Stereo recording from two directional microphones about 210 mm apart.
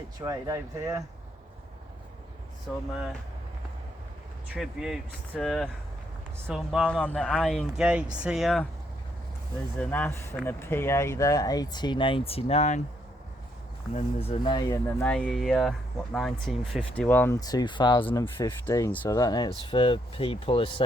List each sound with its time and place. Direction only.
0.2 s speech: 15° right (ahead or behind)
4.5 s speech: centre (ahead or behind)
9.7 s speech: 5° left (ahead or behind); by 12.8 s 30° left (ahead or behind)
13.9 s speech: 30° left (ahead or behind)